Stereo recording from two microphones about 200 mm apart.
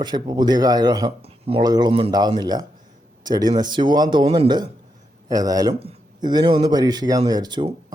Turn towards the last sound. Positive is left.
turn(degrees=-20)  # may be behind; listen again after turning